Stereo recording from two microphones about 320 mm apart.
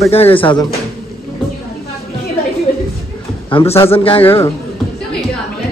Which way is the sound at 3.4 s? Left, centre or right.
Centre.